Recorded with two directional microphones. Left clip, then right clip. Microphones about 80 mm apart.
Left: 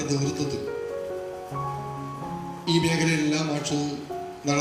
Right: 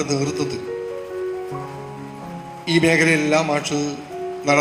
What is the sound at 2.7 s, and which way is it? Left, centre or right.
Speech, right.